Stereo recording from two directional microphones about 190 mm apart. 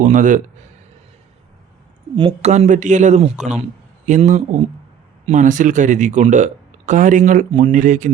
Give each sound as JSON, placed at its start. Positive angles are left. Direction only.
{"t": 0.0, "sound": "a man's voice", "side_deg": -40}
{"t": 2.1, "sound": "a man's voice", "side_deg": -30}